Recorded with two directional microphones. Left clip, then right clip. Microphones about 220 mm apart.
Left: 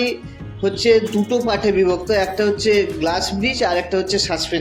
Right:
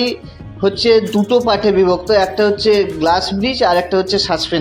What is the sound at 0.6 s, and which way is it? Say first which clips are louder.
Speech: right 3 dB; 20° right (ahead or behind).